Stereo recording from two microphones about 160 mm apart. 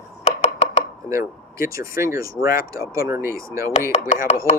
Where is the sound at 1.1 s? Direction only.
20° right (ahead or behind).